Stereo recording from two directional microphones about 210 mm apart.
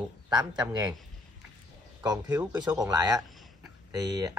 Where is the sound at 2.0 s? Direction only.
15° right (ahead or behind).